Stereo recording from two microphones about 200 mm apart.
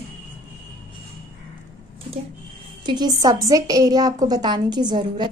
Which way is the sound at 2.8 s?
20° right (ahead or behind).